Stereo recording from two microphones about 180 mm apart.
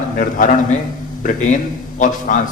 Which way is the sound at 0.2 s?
45° left (ahead or behind).